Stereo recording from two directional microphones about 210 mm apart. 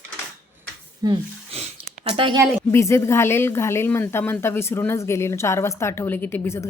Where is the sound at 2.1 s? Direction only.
25° right (ahead or behind).